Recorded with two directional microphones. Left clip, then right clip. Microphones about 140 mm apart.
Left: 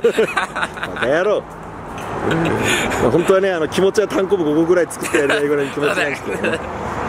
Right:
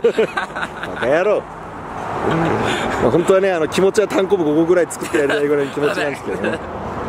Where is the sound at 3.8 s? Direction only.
20° right (ahead or behind); by 6.6 s centre (ahead or behind).